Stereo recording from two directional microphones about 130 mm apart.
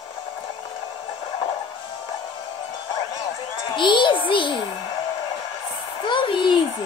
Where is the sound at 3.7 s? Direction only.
40° left (ahead or behind).